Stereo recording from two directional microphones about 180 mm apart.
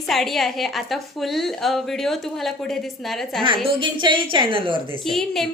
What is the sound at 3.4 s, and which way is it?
A woman's voice, 25° right (ahead or behind).